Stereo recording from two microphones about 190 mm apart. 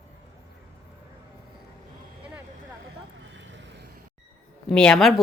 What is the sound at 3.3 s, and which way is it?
Vehicle, 75° right (ahead or behind).